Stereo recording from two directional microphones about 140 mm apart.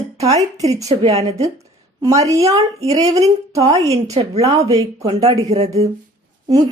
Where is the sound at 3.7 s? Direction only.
50° right (ahead or behind).